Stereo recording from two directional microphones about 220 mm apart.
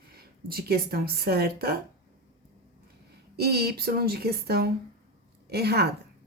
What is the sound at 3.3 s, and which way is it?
A woman's voice, 45° right (ahead or behind).